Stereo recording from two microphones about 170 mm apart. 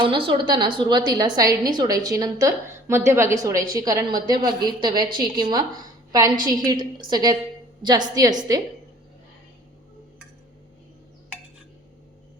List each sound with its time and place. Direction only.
0.0 s a woman's voice: 30° right (ahead or behind)
6.7 s a woman's voice: 25° right (ahead or behind)